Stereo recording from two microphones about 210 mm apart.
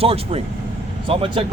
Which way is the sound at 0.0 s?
30° right (ahead or behind).